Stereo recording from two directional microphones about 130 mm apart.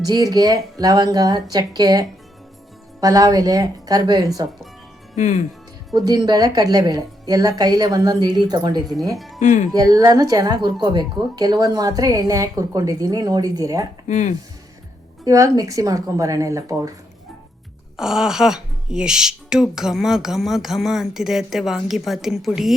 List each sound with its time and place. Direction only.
0.0 s speech: 30° right (ahead or behind)
5.1 s speech: 70° left (ahead or behind)
5.9 s speech: 30° right (ahead or behind)
9.1 s speech: centre (ahead or behind)
9.4 s speech: 75° left (ahead or behind)
9.7 s speech: 30° right (ahead or behind)
14.1 s speech: 70° left (ahead or behind)
15.2 s speech: 25° right (ahead or behind)
17.9 s speech: 5° right (ahead or behind)